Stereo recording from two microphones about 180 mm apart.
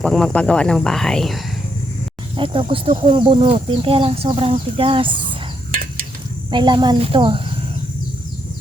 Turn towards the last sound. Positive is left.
turn(degrees=-30)  # may be behind; listen again after turning